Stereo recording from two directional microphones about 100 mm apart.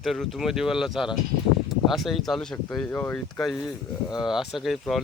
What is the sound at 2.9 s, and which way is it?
Speech, 20° left (ahead or behind).